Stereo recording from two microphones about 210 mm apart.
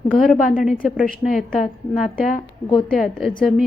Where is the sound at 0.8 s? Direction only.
Centre (ahead or behind).